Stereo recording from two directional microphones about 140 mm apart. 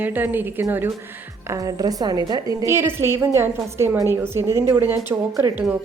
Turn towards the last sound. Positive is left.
turn(degrees=-15)  # may be behind; listen again after turning